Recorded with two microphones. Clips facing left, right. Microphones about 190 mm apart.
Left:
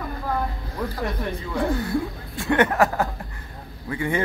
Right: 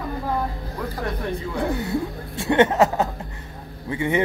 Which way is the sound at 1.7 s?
20° right (ahead or behind).